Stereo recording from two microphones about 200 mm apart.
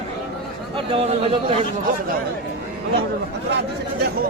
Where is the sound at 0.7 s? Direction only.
30° right (ahead or behind).